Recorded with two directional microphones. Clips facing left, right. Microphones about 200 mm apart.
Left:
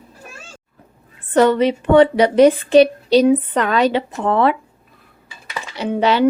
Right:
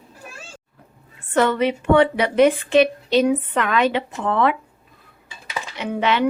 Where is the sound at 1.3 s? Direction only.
35° left (ahead or behind).